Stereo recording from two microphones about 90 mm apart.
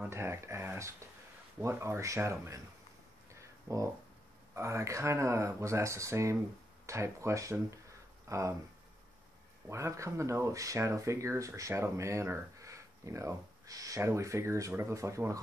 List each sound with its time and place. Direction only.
0.1 s speech: 30° right (ahead or behind)
3.3 s a sound: 35° right (ahead or behind)
4.6 s speech: 35° right (ahead or behind)
9.7 s speech: 35° right (ahead or behind)